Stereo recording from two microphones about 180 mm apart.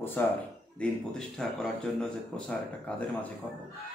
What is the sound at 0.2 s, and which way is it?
Speech, 10° left (ahead or behind).